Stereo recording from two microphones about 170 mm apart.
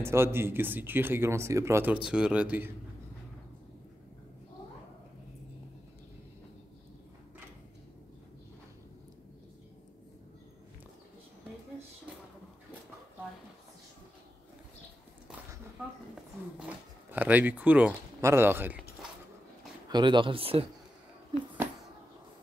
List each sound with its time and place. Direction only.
0.0 s speech: 15° right (ahead or behind)
16.5 s zipper: 10° right (ahead or behind)
19.9 s speech: 25° right (ahead or behind)